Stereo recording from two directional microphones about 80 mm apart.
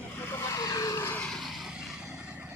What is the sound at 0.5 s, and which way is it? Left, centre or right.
Vehicle, left.